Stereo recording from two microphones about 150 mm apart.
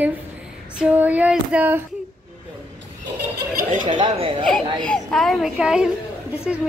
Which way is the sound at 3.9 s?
30° right (ahead or behind).